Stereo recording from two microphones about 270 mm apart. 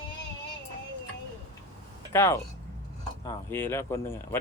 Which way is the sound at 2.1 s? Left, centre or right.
Centre.